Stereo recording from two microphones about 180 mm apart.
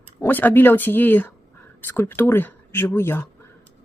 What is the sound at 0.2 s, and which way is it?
Speech, 10° left (ahead or behind).